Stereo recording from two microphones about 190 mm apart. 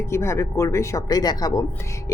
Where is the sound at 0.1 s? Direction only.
15° left (ahead or behind).